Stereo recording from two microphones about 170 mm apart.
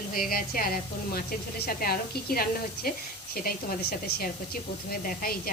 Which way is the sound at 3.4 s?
65° left (ahead or behind).